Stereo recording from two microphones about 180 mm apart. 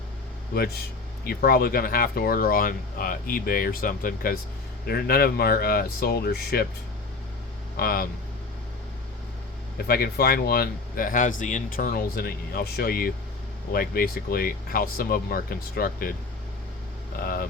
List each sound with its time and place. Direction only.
1.2 s speech: 55° left (ahead or behind)
7.8 s speech: 60° left (ahead or behind)
9.7 s speech: 60° left (ahead or behind)
17.2 s speech: 55° left (ahead or behind)